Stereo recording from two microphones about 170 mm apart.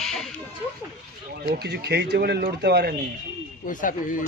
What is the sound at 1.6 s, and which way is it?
Speech, 75° right (ahead or behind).